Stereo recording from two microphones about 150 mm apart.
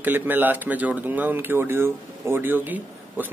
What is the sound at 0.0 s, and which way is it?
Speech, 15° right (ahead or behind).